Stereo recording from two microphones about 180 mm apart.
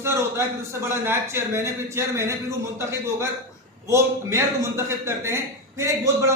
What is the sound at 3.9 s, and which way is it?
A man's voice, 15° right (ahead or behind).